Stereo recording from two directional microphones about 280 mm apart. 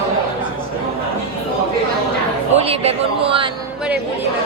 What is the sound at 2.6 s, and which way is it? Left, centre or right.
Speech, right.